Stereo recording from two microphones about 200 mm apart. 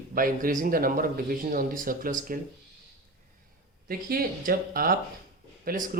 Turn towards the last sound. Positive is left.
turn(degrees=-45)  # may be behind; listen again after turning